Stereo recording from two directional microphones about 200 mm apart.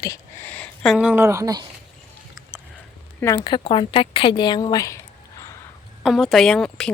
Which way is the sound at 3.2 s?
15° left (ahead or behind).